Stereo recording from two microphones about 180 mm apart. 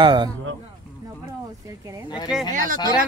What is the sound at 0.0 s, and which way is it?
Speech, 25° right (ahead or behind).